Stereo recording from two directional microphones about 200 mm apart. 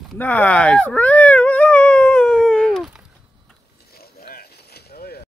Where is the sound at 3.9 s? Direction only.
50° left (ahead or behind).